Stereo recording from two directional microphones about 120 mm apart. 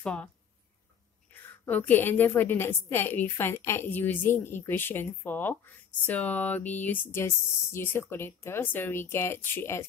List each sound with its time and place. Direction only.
0.0 s a woman's voice: 10° left (ahead or behind)
1.3 s a woman's voice: 15° left (ahead or behind)